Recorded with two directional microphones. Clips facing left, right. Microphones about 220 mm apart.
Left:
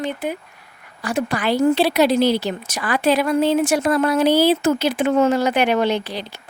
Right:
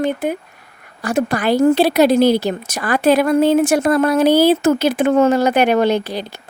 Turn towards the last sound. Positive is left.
turn(degrees=-45)  # may be behind; listen again after turning